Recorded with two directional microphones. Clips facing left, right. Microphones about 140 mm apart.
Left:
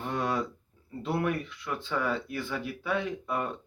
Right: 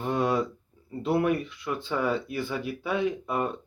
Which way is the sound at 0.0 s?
10° right (ahead or behind).